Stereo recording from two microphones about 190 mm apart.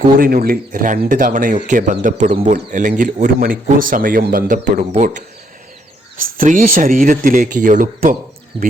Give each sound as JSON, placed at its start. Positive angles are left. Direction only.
{"t": 0.2, "sound": "speech", "side_deg": -50}
{"t": 2.7, "sound": "speech", "side_deg": -45}
{"t": 6.1, "sound": "speech", "side_deg": -45}
{"t": 8.5, "sound": "speech", "side_deg": -30}